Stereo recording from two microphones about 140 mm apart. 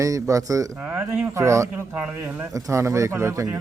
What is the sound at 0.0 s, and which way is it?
Speech, 20° right (ahead or behind).